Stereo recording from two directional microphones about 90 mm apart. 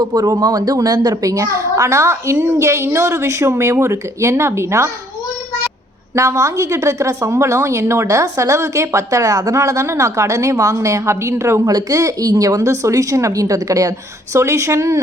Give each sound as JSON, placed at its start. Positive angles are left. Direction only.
{"t": 0.0, "sound": "a woman's voice", "side_deg": -45}
{"t": 6.1, "sound": "a woman's voice", "side_deg": -35}